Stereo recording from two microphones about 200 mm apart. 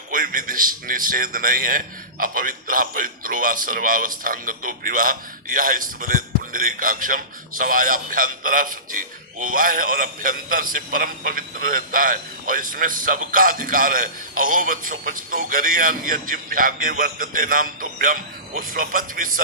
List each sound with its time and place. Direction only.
0.1 s a man's voice: 45° right (ahead or behind)